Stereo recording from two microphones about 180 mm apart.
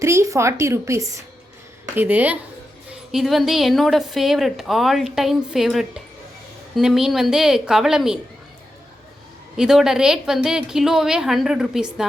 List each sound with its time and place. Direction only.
0.0 s a woman's voice: 15° right (ahead or behind)
9.6 s a woman's voice: 5° right (ahead or behind)